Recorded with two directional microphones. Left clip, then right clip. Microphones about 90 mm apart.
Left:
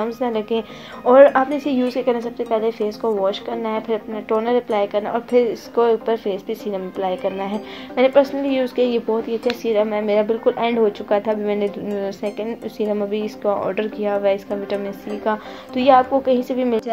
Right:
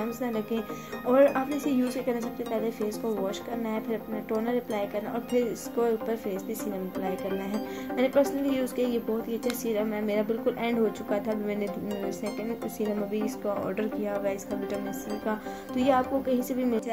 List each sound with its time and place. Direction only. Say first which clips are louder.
0.0 s speech: left 10 dB; 40° left (ahead or behind)